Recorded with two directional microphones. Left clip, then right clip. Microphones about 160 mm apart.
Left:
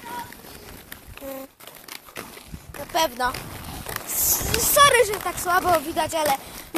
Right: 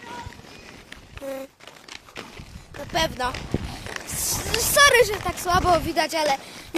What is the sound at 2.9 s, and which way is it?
Speech, 10° left (ahead or behind).